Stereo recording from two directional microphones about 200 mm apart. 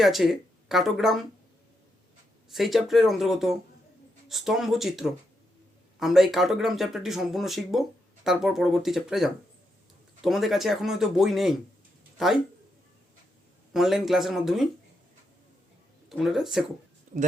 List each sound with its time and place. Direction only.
0.0 s speech: centre (ahead or behind)
2.5 s speech: centre (ahead or behind)
13.7 s speech: centre (ahead or behind)
16.0 s speech: centre (ahead or behind)
17.1 s a sound: 40° right (ahead or behind)